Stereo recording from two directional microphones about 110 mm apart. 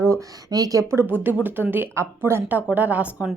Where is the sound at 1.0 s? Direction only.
15° right (ahead or behind).